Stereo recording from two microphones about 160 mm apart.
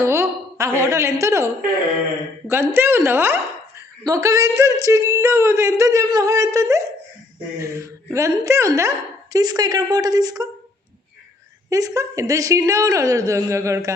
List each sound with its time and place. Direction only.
0.0 s a woman's voice: 20° right (ahead or behind)
2.5 s a woman's voice: 15° right (ahead or behind)
11.7 s a woman's voice: 20° right (ahead or behind)